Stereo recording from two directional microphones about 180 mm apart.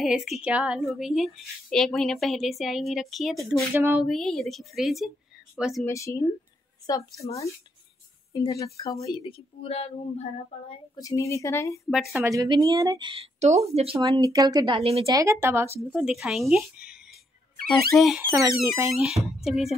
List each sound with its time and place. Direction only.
0.0 s a woman's voice: centre (ahead or behind)
4.1 s a woman's voice: centre (ahead or behind)
5.9 s a woman's voice: 15° left (ahead or behind)
8.3 s speech: 20° left (ahead or behind)
9.2 s speech: 30° left (ahead or behind)
11.0 s a woman's voice: 20° left (ahead or behind)
11.9 s a woman's voice: centre (ahead or behind)
12.2 s a woman's voice: 20° right (ahead or behind)
13.1 s speech: 35° right (ahead or behind)
14.2 s a woman's voice: 20° right (ahead or behind)
14.8 s speech: 35° right (ahead or behind)
15.0 s a woman's voice: 20° right (ahead or behind); by 18.2 s centre (ahead or behind)
18.2 s speech: 15° right (ahead or behind)
19.4 s a woman's voice: centre (ahead or behind)